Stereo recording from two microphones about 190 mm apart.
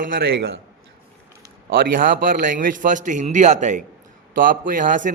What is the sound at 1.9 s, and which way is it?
A man's voice, 45° right (ahead or behind).